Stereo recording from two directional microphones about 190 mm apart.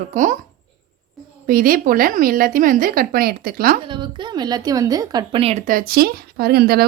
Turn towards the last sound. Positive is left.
turn(degrees=-55)  # may be behind; listen again after turning